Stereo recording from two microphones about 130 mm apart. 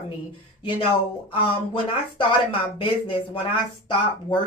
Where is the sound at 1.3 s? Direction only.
45° left (ahead or behind).